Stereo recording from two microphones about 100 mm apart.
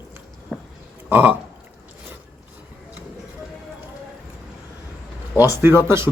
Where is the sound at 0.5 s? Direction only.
15° right (ahead or behind).